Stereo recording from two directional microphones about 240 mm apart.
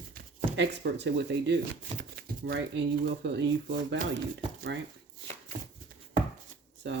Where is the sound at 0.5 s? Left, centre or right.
Right.